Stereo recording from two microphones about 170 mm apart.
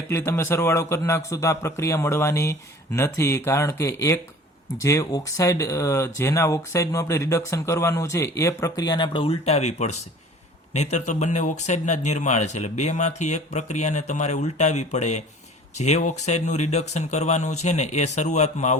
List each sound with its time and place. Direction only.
0.1 s a man's voice: 15° left (ahead or behind); by 18.8 s 45° left (ahead or behind)